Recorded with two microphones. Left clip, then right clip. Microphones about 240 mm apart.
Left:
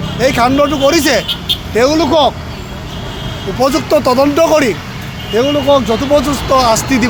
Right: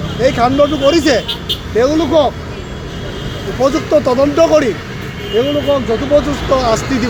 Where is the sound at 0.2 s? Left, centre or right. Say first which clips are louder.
Left 1 dB; left.